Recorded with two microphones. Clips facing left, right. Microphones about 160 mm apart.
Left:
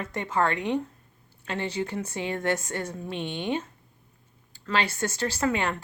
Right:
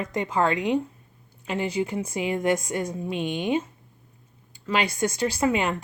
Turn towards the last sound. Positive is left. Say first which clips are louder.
# right 3 dB
turn(degrees=-15)  # may be behind; listen again after turning